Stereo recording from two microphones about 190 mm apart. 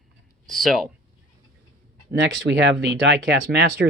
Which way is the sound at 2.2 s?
75° right (ahead or behind).